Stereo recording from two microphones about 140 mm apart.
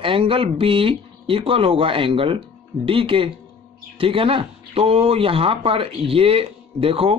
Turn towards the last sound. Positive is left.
turn(degrees=-40)  # may be behind; listen again after turning